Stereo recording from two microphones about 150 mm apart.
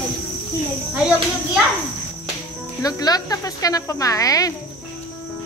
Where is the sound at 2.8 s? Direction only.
25° left (ahead or behind).